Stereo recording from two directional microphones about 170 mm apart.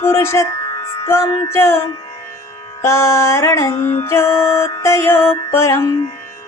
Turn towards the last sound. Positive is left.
turn(degrees=15)  # may be behind; listen again after turning